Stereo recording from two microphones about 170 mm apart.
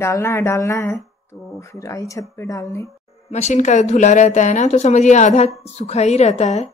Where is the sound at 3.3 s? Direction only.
40° left (ahead or behind).